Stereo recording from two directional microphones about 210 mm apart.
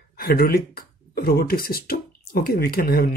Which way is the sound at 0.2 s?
45° left (ahead or behind).